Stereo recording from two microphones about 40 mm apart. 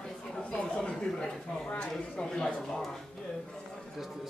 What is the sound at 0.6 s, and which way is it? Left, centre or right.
Speech, left.